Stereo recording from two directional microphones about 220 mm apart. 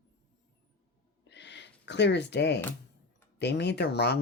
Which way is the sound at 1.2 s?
50° left (ahead or behind).